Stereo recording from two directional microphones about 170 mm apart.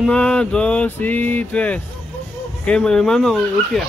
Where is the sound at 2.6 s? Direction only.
5° left (ahead or behind).